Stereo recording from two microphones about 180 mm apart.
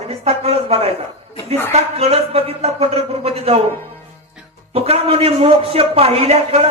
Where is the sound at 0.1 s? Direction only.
35° right (ahead or behind).